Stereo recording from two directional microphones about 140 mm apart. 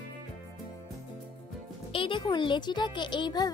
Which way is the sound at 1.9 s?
35° left (ahead or behind).